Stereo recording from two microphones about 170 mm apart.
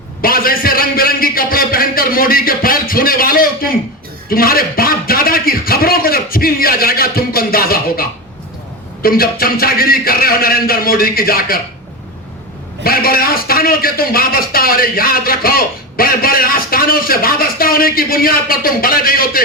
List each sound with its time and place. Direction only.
0.2 s a man's voice: 60° left (ahead or behind)
12.8 s a man's voice: 60° left (ahead or behind)